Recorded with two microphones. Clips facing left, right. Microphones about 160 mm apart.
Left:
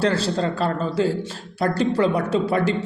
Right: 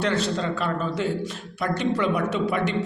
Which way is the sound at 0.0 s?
30° left (ahead or behind).